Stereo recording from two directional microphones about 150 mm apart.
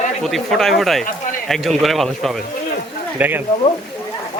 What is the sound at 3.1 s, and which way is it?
Speech, 15° right (ahead or behind).